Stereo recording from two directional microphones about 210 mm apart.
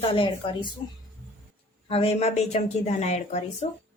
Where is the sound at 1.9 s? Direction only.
30° left (ahead or behind).